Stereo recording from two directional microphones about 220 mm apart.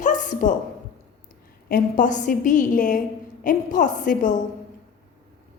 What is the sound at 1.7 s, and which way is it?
A woman's voice, 35° left (ahead or behind).